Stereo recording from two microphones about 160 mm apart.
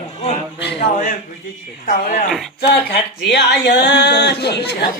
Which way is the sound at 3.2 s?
90° left.